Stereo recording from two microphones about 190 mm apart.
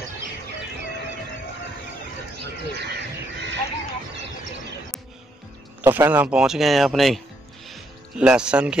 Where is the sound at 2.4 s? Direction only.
60° right (ahead or behind).